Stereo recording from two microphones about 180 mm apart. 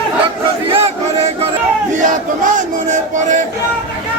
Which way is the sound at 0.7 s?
35° right (ahead or behind).